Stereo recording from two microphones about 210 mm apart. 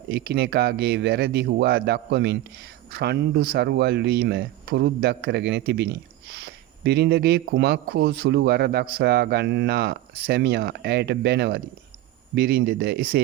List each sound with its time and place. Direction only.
0.1 s speech: 50° right (ahead or behind)